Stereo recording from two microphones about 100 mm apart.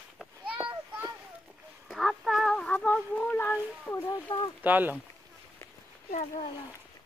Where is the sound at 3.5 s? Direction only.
25° left (ahead or behind).